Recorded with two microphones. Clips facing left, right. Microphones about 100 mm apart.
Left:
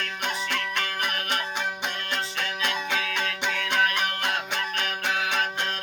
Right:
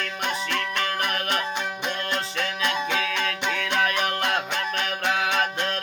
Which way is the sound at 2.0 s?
5° left (ahead or behind).